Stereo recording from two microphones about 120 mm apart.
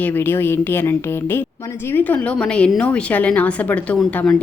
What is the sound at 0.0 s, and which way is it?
A woman's voice, 15° left (ahead or behind).